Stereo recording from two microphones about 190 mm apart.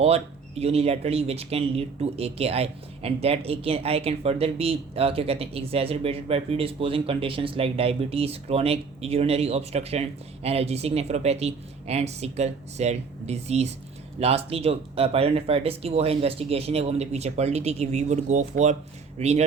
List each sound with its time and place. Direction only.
0.6 s speech: 30° right (ahead or behind)